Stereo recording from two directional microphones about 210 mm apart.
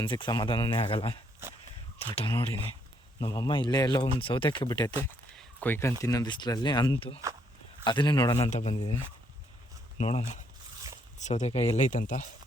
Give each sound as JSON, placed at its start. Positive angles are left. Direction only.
{"t": 0.0, "sound": "speech", "side_deg": 25}
{"t": 8.4, "sound": "speech", "side_deg": 30}
{"t": 10.0, "sound": "speech", "side_deg": 30}